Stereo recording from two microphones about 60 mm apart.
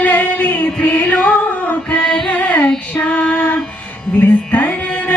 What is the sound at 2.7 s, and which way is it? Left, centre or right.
Female singing, centre.